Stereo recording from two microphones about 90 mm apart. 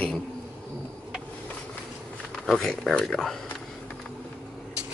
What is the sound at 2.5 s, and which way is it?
Speech, 5° left (ahead or behind).